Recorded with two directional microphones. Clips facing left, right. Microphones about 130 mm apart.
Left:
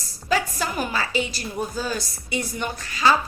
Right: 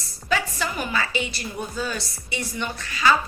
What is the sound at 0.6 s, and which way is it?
A woman's voice, 40° left (ahead or behind).